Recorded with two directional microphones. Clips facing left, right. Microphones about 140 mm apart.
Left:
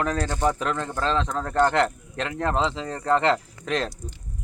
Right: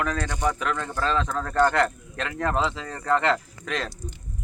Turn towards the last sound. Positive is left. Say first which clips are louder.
# left 4 dB
turn(degrees=30)  # may be behind; listen again after turning